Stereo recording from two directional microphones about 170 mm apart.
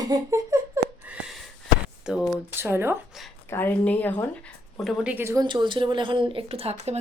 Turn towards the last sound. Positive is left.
turn(degrees=-35)  # may be behind; listen again after turning